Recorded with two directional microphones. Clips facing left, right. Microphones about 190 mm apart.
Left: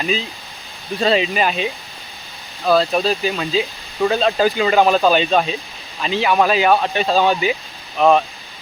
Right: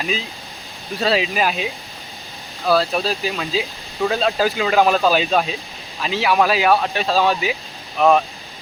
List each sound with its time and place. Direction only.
0.0 s speech: centre (ahead or behind)